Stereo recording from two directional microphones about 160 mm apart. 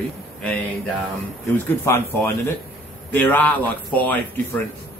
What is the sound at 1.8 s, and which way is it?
A man's voice, 15° left (ahead or behind).